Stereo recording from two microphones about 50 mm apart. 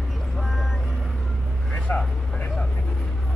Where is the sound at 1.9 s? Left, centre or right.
Left.